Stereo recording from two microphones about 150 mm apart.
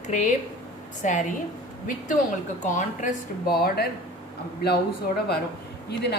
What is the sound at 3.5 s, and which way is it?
Speech, 90° left.